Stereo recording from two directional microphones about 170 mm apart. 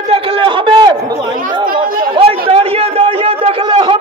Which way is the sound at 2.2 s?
35° right (ahead or behind).